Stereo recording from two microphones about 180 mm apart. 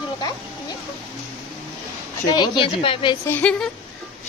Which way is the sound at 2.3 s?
25° left (ahead or behind).